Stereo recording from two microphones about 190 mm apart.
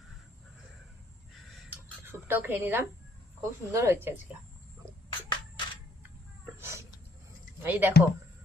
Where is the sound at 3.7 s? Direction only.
15° right (ahead or behind).